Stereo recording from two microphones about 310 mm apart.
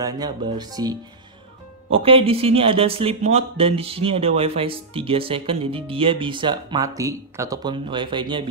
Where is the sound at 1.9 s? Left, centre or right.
Centre.